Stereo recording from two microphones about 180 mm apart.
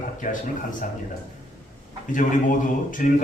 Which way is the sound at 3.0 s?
45° left (ahead or behind).